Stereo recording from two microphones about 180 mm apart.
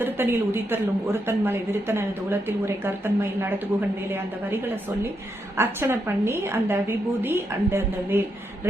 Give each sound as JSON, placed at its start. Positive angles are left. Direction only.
{"t": 0.0, "sound": "a woman's voice", "side_deg": -10}